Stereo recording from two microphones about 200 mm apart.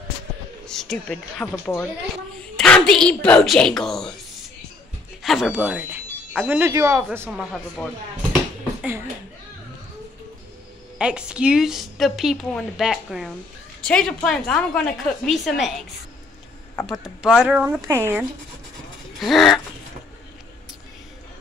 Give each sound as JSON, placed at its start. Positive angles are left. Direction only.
{"t": 0.7, "sound": "a woman's voice", "side_deg": 0}
{"t": 5.2, "sound": "speech", "side_deg": 0}
{"t": 7.1, "sound": "a woman's voice", "side_deg": -5}
{"t": 11.0, "sound": "a woman's voice", "side_deg": -5}
{"t": 17.0, "sound": "speech", "side_deg": 0}
{"t": 19.1, "sound": "a woman's voice", "side_deg": 0}